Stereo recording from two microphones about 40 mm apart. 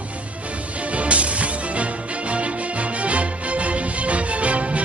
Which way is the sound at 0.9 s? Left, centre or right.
Right.